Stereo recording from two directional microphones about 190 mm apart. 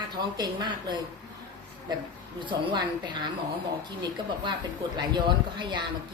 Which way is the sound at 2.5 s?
25° right (ahead or behind).